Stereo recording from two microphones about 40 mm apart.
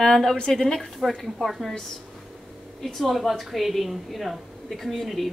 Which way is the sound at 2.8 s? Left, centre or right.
Centre.